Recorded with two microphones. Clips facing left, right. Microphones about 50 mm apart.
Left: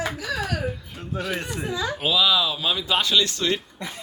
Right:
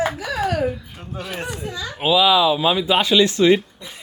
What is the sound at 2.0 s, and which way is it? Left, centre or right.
Speech, centre.